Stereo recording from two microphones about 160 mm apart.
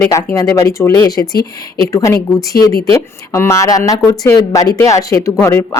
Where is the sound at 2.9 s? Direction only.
15° left (ahead or behind).